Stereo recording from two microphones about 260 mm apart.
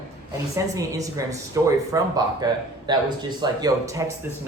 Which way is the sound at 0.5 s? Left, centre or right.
Centre.